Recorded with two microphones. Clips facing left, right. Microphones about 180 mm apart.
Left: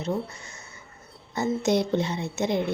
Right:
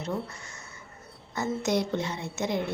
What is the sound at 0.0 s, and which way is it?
A woman's voice, 20° left (ahead or behind).